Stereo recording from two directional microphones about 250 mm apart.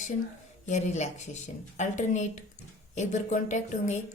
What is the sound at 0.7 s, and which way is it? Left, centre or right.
A woman's voice, left.